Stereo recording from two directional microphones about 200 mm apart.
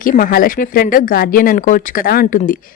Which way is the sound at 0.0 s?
45° left (ahead or behind).